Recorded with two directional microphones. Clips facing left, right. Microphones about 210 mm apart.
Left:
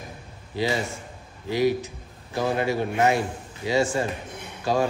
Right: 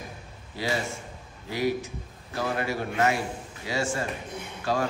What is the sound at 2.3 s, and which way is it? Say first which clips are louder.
A man's voice: left 5 dB; 20° left (ahead or behind).